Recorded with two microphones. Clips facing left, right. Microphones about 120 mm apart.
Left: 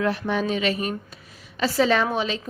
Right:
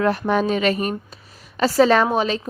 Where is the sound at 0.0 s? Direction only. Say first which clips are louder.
Right 5 dB; 45° right (ahead or behind).